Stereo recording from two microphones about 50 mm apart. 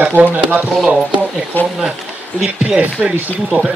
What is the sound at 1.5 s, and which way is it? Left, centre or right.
Speech, left.